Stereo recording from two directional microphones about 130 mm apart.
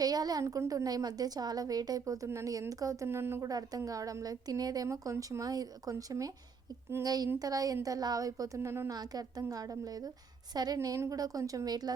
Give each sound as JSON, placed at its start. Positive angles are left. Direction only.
{"t": 0.0, "sound": "a woman's voice", "side_deg": -30}